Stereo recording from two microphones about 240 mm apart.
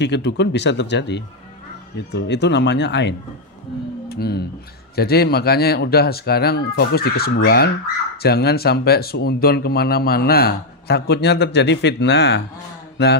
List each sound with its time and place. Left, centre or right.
0.0 s speech: left